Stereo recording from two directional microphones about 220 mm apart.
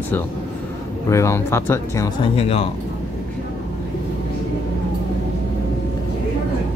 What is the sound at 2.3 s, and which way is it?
Speech, 25° left (ahead or behind).